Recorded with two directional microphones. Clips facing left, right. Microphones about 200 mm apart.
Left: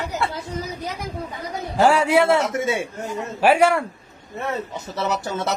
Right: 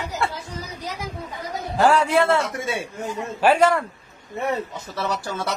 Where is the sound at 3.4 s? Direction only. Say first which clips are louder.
Left 1 dB; 10° left (ahead or behind).